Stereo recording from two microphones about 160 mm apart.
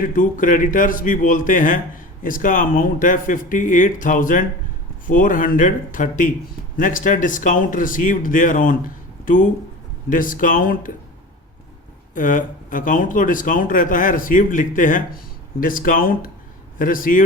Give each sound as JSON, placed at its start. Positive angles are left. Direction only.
{"t": 0.0, "sound": "speech", "side_deg": 55}
{"t": 12.1, "sound": "speech", "side_deg": 55}